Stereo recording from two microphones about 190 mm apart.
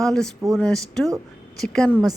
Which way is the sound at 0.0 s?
Centre (ahead or behind).